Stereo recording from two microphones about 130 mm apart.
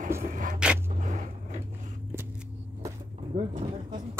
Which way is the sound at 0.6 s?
5° right (ahead or behind).